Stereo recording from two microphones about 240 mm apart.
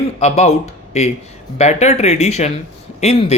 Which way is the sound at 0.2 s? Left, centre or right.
Left.